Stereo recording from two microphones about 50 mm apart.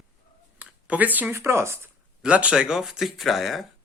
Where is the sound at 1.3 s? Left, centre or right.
Right.